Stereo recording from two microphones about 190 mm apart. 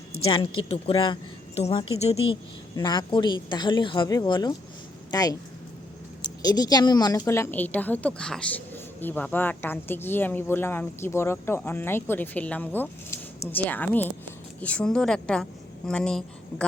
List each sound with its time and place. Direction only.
0.3 s a woman's voice: 30° left (ahead or behind)
6.4 s a woman's voice: 20° left (ahead or behind); by 16.6 s 5° left (ahead or behind)